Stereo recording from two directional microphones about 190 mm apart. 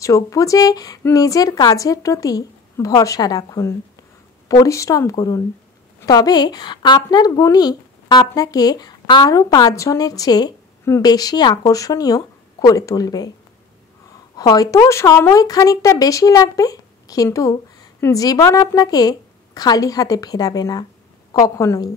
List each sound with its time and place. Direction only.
0.0 s speech: 15° left (ahead or behind)
14.3 s speech: 20° left (ahead or behind)